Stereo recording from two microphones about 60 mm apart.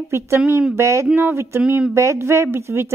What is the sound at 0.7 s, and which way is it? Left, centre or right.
Speech, right.